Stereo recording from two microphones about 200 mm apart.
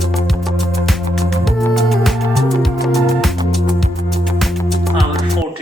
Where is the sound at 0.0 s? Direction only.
Centre (ahead or behind).